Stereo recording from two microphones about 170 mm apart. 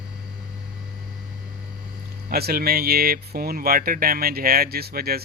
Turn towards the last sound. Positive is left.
turn(degrees=-65)  # may be behind; listen again after turning